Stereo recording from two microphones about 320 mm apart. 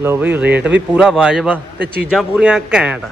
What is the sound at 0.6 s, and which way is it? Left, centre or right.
Speech, right.